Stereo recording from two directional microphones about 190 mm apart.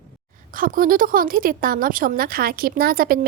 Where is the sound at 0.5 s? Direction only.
45° right (ahead or behind).